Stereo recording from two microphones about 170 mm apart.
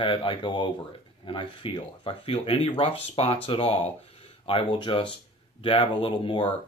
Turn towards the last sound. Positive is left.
turn(degrees=30)  # may be behind; listen again after turning